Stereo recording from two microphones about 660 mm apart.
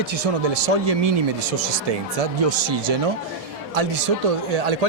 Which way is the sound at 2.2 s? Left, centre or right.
Right.